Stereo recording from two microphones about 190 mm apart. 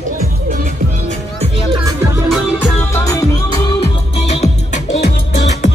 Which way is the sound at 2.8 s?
15° left (ahead or behind).